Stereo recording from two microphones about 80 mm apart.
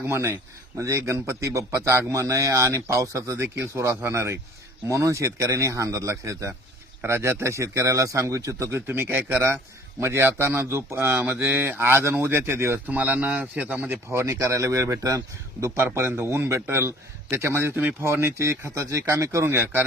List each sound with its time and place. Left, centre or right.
0.1 s a man's voice: right
8.9 s speech: right
12.9 s speech: centre
14.1 s a man's voice: right